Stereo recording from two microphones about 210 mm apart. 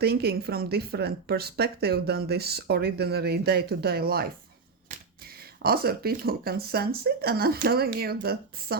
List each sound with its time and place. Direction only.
0.0 s speech: 50° right (ahead or behind)
5.6 s speech: 45° right (ahead or behind)